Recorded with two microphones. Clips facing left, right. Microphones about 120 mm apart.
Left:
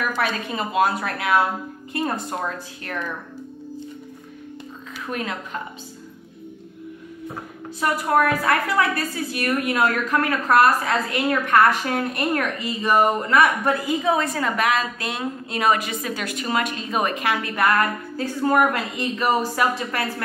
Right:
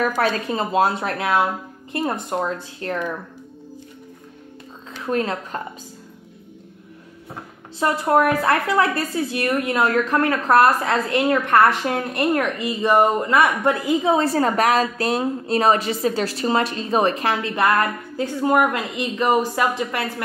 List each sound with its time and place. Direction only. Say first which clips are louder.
0.2 s a woman's voice: right 4 dB; 35° right (ahead or behind)
5.0 s a woman's voice: right 6 dB; 30° right (ahead or behind)
7.8 s a woman's voice: right 2 dB; 25° right (ahead or behind)